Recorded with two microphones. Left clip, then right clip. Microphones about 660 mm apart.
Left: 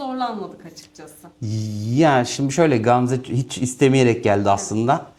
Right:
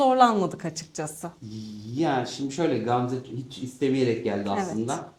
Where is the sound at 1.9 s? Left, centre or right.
Left.